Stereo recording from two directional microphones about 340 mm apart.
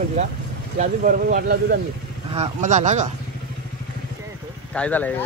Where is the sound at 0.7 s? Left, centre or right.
Right.